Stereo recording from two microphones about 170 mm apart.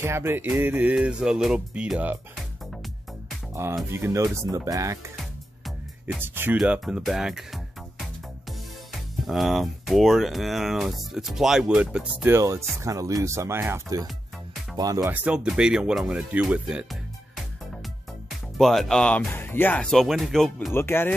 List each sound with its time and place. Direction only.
0.0 s music: 15° right (ahead or behind)
3.6 s music: 15° right (ahead or behind)
3.9 s speech: 15° right (ahead or behind)
9.2 s speech: centre (ahead or behind)
12.4 s music: 20° right (ahead or behind)
14.8 s speech: 20° right (ahead or behind)
15.1 s speech: 5° right (ahead or behind)
18.6 s speech: centre (ahead or behind)
20.7 s speech: 15° left (ahead or behind)